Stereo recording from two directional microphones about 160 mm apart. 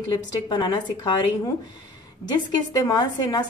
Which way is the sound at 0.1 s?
25° left (ahead or behind).